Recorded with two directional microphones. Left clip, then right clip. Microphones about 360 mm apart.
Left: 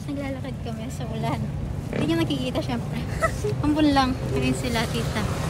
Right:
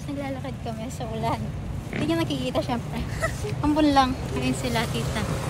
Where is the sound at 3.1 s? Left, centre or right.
Centre.